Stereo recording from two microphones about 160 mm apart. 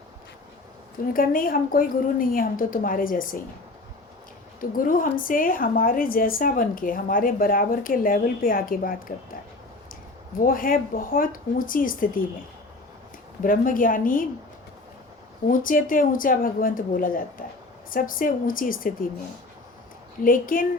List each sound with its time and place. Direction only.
1.1 s a woman's voice: 60° left (ahead or behind)
4.6 s a woman's voice: 60° left (ahead or behind)
10.4 s a woman's voice: 60° left (ahead or behind)
13.4 s a woman's voice: 60° left (ahead or behind)
15.4 s a woman's voice: 60° left (ahead or behind)
20.2 s a woman's voice: 60° left (ahead or behind)